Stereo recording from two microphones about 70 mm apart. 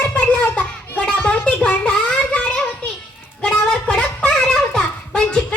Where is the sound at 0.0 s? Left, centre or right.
Centre.